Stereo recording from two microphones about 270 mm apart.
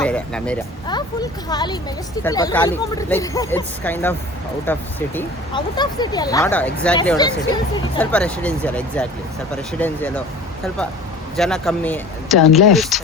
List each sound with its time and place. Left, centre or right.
0.0 s speech: centre
0.9 s speech: centre
7.2 s speech: centre
8.1 s speech: centre
11.3 s speech: centre